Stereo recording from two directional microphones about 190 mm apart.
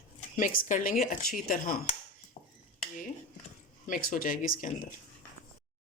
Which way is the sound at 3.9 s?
45° left (ahead or behind).